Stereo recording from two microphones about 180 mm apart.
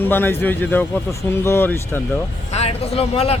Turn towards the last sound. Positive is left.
turn(degrees=35)  # may be behind; listen again after turning